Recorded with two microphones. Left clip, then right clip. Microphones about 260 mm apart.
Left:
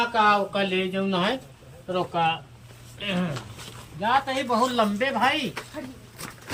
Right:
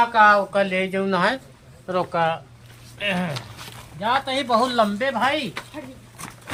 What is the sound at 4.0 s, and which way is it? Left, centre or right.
Speech, centre.